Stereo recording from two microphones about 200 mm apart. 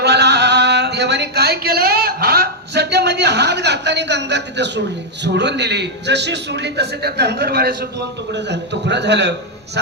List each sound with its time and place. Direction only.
0.0 s a sound: 55° right (ahead or behind)
5.2 s a man's voice: 60° right (ahead or behind)
9.8 s music: 60° right (ahead or behind)